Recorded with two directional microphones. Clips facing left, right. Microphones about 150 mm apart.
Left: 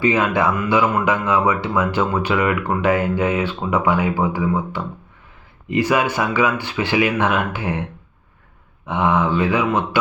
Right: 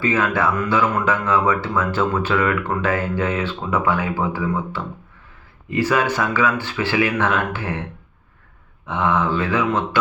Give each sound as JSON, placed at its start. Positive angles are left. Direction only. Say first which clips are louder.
{"t": 0.0, "sound": "speech", "louder": "left 2 dB", "side_deg": 15}
{"t": 8.9, "sound": "speech", "louder": "left 2 dB", "side_deg": 15}